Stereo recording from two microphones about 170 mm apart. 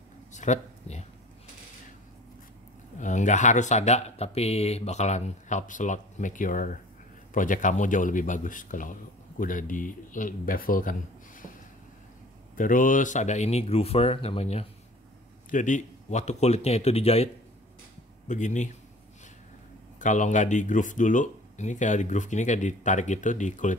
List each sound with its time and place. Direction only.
0.3 s a sound: 45° left (ahead or behind)
3.0 s speech: 45° left (ahead or behind)
12.5 s speech: 50° left (ahead or behind); by 14.7 s 35° left (ahead or behind)
15.5 s speech: 50° left (ahead or behind)
18.3 s speech: 45° left (ahead or behind)
20.0 s speech: 45° left (ahead or behind)